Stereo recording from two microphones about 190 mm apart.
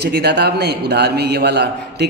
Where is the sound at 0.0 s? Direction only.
60° right (ahead or behind).